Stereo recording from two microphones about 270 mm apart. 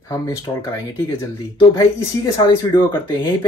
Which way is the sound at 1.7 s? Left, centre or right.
Centre.